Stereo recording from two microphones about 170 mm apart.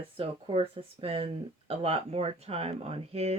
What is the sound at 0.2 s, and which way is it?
Speech, 35° right (ahead or behind).